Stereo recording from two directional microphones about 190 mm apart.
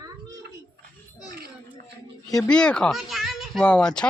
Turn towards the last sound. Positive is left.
turn(degrees=5)  # may be behind; listen again after turning